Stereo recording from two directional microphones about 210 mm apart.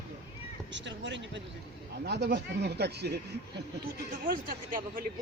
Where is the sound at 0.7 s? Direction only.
60° right (ahead or behind).